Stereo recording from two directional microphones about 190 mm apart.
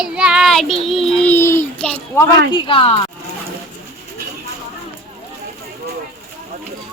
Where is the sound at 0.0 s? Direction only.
5° right (ahead or behind).